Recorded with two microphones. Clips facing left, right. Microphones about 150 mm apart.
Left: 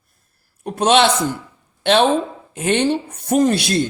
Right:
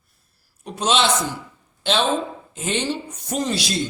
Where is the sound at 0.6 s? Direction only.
60° left (ahead or behind).